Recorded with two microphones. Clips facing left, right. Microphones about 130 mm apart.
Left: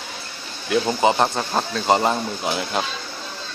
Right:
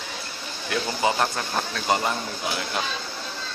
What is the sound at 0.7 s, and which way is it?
Speech, 25° left (ahead or behind).